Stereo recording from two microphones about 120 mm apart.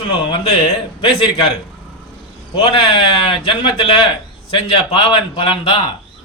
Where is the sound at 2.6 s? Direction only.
50° left (ahead or behind).